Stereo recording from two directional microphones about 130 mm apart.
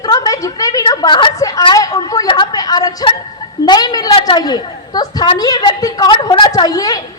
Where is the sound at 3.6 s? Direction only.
30° left (ahead or behind).